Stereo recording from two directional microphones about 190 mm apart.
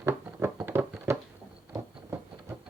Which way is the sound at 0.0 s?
15° right (ahead or behind).